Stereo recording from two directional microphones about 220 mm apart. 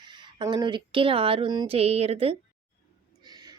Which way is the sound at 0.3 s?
20° right (ahead or behind).